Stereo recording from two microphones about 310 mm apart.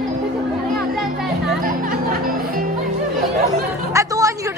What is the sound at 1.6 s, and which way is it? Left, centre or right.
Music, right.